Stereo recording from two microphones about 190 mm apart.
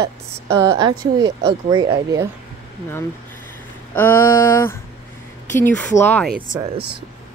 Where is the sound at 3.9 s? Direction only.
10° left (ahead or behind).